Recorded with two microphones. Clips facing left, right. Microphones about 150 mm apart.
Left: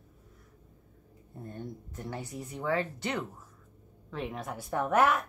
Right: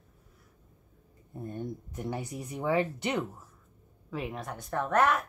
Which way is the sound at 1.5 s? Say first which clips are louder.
Right 4 dB; 15° right (ahead or behind).